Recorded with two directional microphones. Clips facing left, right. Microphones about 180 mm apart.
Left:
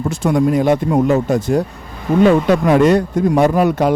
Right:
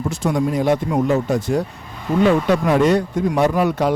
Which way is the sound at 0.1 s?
55° left (ahead or behind).